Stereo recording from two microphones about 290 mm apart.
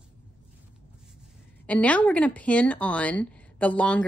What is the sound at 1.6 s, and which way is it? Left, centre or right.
Speech, centre.